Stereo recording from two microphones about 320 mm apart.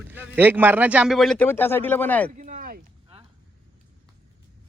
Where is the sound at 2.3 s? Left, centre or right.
Right.